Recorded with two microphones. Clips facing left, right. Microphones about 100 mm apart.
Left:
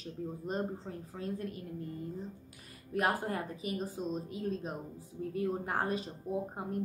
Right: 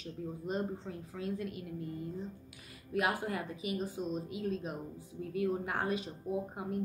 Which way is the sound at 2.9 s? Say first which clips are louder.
Left 1 dB; 40° left (ahead or behind).